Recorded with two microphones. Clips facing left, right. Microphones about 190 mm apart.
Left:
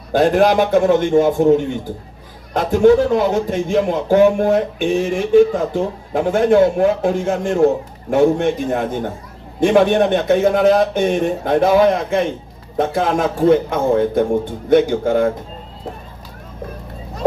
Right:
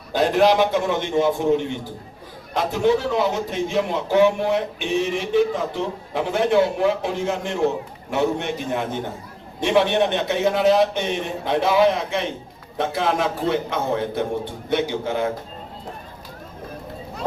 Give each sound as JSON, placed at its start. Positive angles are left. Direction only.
{"t": 0.1, "sound": "a man's voice", "side_deg": 50}